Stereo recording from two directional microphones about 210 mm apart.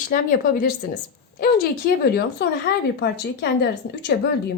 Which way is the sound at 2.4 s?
50° left (ahead or behind).